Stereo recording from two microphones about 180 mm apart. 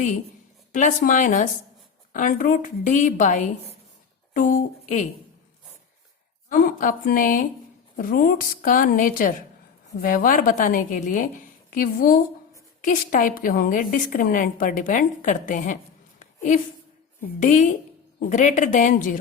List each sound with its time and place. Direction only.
0.7 s a woman's voice: 45° left (ahead or behind)
6.5 s a woman's voice: 50° left (ahead or behind)